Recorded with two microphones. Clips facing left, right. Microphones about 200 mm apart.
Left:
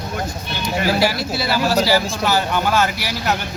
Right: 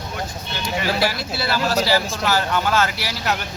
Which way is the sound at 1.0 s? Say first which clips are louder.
Left 3 dB; 10° left (ahead or behind).